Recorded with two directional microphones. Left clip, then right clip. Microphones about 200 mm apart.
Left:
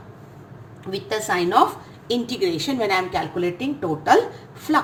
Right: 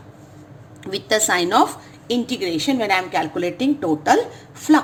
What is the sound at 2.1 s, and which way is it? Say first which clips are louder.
A woman's voice: even; 25° right (ahead or behind).